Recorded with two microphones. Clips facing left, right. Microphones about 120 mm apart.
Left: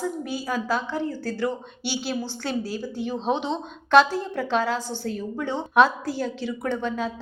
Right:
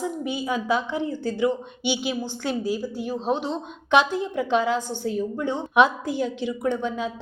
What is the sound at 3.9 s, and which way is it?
A woman's voice, 15° right (ahead or behind).